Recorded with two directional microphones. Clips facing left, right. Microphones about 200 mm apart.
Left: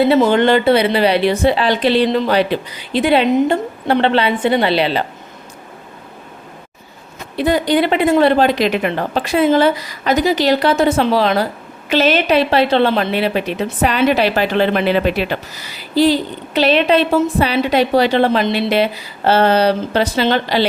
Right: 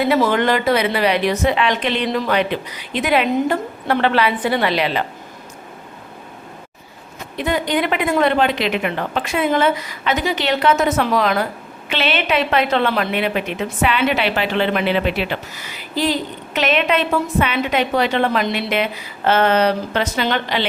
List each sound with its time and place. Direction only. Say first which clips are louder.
0.0 s a woman's voice: left 5 dB; 30° left (ahead or behind)
7.3 s a woman's voice: left 5 dB; 35° left (ahead or behind)